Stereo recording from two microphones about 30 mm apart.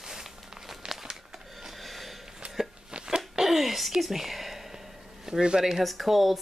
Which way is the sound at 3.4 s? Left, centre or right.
Centre.